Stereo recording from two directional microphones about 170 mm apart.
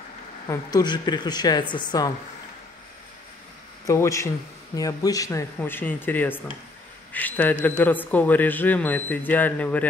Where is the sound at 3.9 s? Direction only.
15° left (ahead or behind).